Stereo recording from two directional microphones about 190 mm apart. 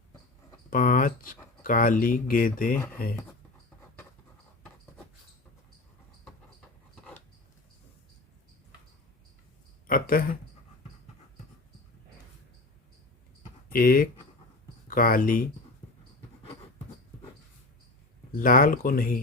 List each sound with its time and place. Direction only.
0.7 s speech: 45° left (ahead or behind)
9.8 s speech: 45° left (ahead or behind)
13.7 s speech: 50° left (ahead or behind)
18.3 s speech: 45° left (ahead or behind)